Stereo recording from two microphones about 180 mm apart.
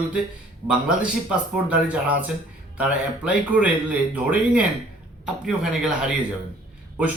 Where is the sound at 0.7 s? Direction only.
5° right (ahead or behind).